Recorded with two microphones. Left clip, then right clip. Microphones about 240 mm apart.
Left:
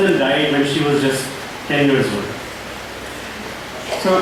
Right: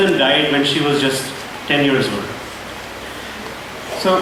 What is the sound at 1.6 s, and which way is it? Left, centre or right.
Speech, centre.